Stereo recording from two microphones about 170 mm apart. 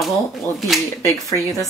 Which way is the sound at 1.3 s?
20° left (ahead or behind).